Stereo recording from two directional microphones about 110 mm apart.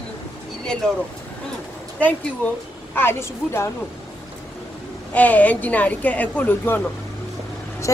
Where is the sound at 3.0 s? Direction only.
20° left (ahead or behind).